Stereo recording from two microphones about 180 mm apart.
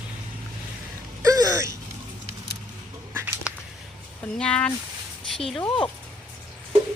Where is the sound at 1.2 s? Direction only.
20° right (ahead or behind).